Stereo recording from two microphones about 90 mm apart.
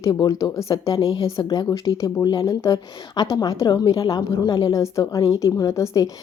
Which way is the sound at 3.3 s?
40° left (ahead or behind).